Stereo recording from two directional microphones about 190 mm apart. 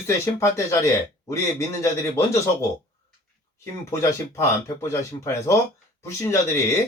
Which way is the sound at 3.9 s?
15° left (ahead or behind).